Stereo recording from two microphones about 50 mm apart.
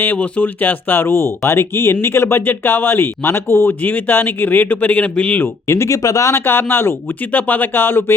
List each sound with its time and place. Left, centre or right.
0.4 s speech: left
3.7 s speech: left
5.6 s speech: left
6.3 s speech: left
7.3 s speech: left